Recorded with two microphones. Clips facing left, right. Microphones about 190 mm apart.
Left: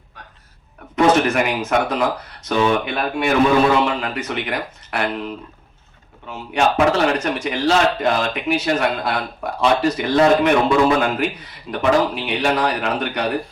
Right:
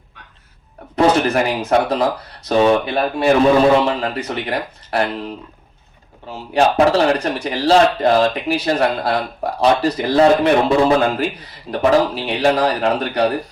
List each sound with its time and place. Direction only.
0.9 s speech: 35° right (ahead or behind)
6.2 s speech: 35° right (ahead or behind)